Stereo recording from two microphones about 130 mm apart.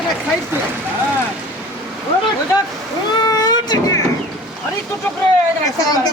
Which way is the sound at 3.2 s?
30° left (ahead or behind).